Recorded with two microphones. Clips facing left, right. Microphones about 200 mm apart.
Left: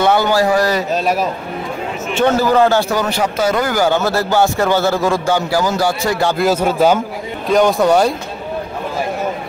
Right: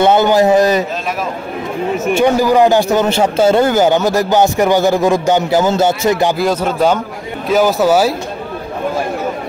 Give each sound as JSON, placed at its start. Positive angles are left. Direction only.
{"t": 0.0, "sound": "a man's voice", "side_deg": -20}
{"t": 2.1, "sound": "a man's voice", "side_deg": -15}
{"t": 6.3, "sound": "speech", "side_deg": 5}